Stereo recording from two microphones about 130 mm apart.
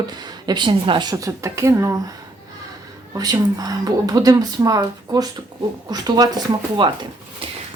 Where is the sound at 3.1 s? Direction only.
30° right (ahead or behind).